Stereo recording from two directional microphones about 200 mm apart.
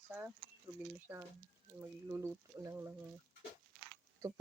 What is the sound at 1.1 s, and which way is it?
Speech, 10° right (ahead or behind).